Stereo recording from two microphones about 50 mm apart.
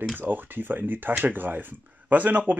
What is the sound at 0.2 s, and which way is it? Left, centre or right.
Speech, right.